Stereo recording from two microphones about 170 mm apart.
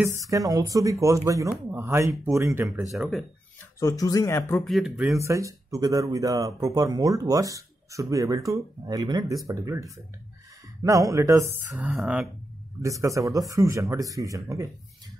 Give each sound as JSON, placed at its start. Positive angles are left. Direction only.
{"t": 0.2, "sound": "speech", "side_deg": -20}
{"t": 2.9, "sound": "speech", "side_deg": 0}
{"t": 3.8, "sound": "speech", "side_deg": 20}
{"t": 4.6, "sound": "speech", "side_deg": 0}
{"t": 5.1, "sound": "speech", "side_deg": -15}
{"t": 11.7, "sound": "speech", "side_deg": 0}
{"t": 12.8, "sound": "speech", "side_deg": -20}